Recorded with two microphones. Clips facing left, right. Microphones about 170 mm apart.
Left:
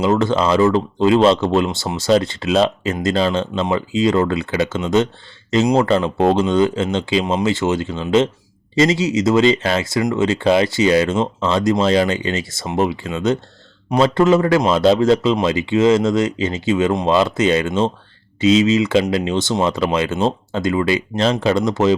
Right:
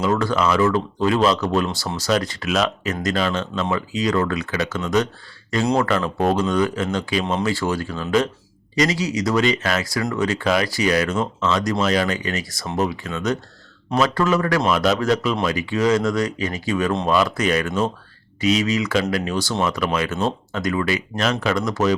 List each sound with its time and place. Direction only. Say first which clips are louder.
0.0 s speech: left 4 dB; 25° left (ahead or behind)